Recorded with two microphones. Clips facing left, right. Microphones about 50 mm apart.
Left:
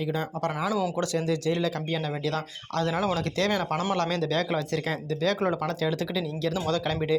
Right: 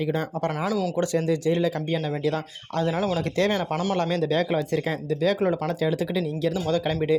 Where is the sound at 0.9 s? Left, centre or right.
Right.